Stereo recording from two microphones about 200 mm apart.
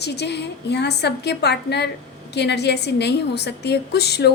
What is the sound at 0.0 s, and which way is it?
A woman's voice, 55° left (ahead or behind).